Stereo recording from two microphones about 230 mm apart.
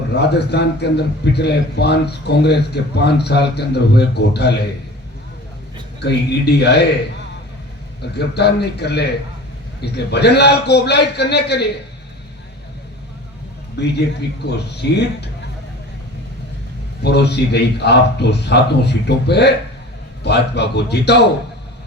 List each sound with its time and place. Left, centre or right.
0.2 s a man's voice: left
6.0 s a man's voice: left
8.1 s a man's voice: left
14.4 s a man's voice: left
17.0 s a man's voice: left